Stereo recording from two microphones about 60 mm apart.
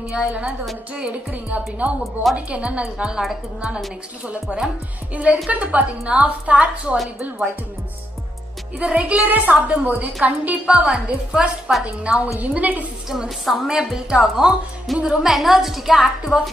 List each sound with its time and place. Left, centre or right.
0.1 s a woman's voice: right
1.8 s a woman's voice: right
8.7 s a woman's voice: right
13.1 s a woman's voice: centre